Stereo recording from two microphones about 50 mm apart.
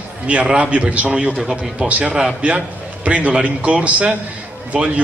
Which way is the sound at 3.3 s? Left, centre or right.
Centre.